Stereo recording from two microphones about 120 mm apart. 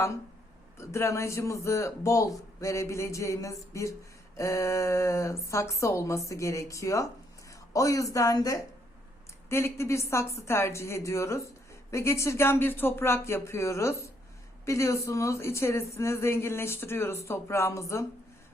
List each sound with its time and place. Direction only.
0.8 s a woman's voice: 25° left (ahead or behind)